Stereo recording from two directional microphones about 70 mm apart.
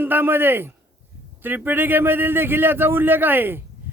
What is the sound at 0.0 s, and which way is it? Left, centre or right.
Speech, right.